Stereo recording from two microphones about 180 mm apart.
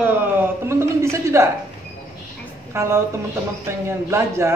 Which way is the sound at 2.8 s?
15° right (ahead or behind).